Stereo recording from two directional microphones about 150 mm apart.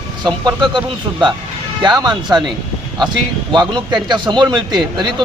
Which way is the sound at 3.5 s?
30° right (ahead or behind).